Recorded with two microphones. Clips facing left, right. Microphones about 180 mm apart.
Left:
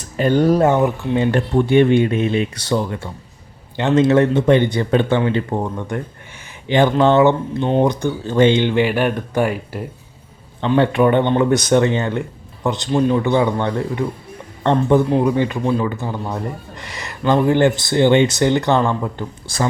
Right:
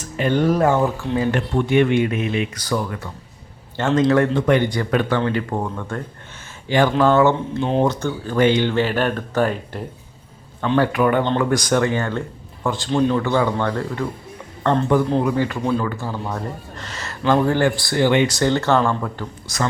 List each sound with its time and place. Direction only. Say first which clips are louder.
0.2 s speech: left 4 dB; 40° left (ahead or behind)
0.6 s speech: left 2 dB; 20° left (ahead or behind)
5.2 s speech: left 3 dB; 15° left (ahead or behind)
7.6 s speech: left 3 dB; centre (ahead or behind)
7.9 s speech: left 3 dB; 15° left (ahead or behind)
10.8 s speech: left 3 dB; 25° left (ahead or behind)
12.9 s speech: left 2 dB; 5° left (ahead or behind)
15.2 s speech: left 3 dB; 20° left (ahead or behind)